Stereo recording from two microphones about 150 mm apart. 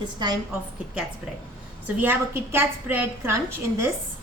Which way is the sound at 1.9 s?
15° right (ahead or behind).